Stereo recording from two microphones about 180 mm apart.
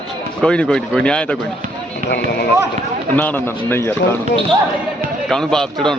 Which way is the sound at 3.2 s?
10° left (ahead or behind).